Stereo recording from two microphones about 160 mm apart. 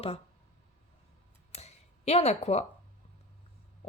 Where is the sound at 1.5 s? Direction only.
40° left (ahead or behind).